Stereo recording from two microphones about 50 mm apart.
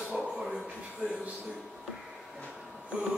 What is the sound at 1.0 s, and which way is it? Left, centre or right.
Speech, right.